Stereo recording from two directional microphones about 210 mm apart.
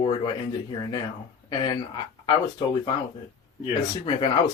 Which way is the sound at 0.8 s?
20° left (ahead or behind).